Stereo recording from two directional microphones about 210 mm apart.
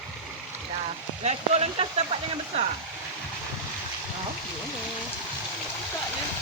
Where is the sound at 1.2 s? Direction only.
30° right (ahead or behind).